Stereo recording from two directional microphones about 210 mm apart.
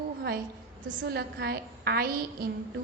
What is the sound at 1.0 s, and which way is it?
A woman's voice, 50° right (ahead or behind).